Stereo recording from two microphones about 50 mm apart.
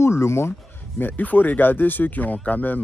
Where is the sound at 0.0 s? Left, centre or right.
Left.